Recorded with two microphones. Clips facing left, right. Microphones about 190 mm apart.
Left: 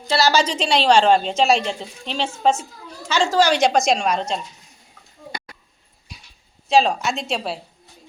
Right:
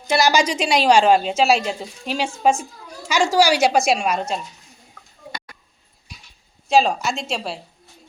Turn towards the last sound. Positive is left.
turn(degrees=0)  # may be behind; listen again after turning